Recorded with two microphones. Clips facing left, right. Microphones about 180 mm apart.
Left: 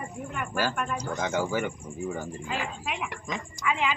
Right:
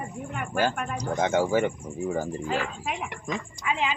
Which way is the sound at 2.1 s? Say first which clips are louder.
Right 6 dB; 40° right (ahead or behind).